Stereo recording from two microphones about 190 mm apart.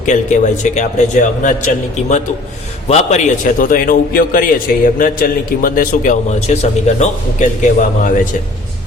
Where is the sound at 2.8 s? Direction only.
35° left (ahead or behind).